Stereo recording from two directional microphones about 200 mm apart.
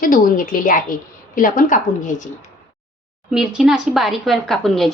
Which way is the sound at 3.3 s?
5° right (ahead or behind).